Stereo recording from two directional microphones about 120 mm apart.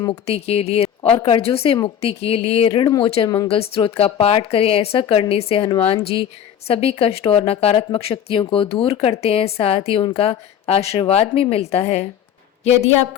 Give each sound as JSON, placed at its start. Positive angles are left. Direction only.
{"t": 0.1, "sound": "a woman's voice", "side_deg": 60}
{"t": 2.7, "sound": "speech", "side_deg": 30}
{"t": 3.0, "sound": "a woman's voice", "side_deg": 50}
{"t": 3.2, "sound": "speech", "side_deg": 30}
{"t": 3.5, "sound": "a woman's voice", "side_deg": 50}